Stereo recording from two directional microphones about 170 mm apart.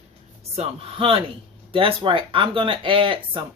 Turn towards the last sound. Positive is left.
turn(degrees=-30)  # may be behind; listen again after turning